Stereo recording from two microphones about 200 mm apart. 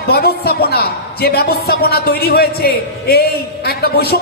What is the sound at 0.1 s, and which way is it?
A woman's voice, 50° left (ahead or behind).